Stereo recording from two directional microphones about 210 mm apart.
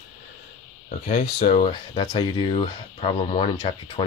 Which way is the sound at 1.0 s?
35° left (ahead or behind).